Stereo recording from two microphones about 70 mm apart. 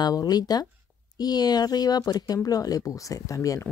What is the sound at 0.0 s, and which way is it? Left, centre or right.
Speech, left.